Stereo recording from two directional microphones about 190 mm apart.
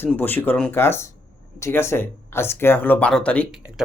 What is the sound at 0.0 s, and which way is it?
Speech, 10° left (ahead or behind).